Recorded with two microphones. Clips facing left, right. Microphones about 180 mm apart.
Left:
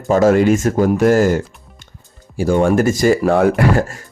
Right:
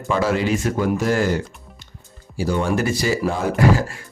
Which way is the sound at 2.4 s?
50° left (ahead or behind).